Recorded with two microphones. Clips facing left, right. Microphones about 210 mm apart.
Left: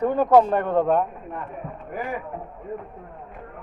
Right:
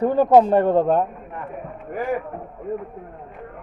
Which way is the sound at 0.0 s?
25° right (ahead or behind).